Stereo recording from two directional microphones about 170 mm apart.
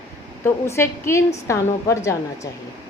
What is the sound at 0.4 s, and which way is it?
A woman's voice, 15° left (ahead or behind).